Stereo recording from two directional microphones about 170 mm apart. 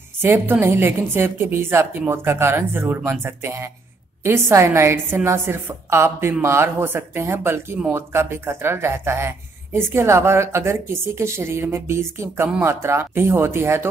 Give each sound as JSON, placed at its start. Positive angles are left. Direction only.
{"t": 0.2, "sound": "a woman's voice", "side_deg": -15}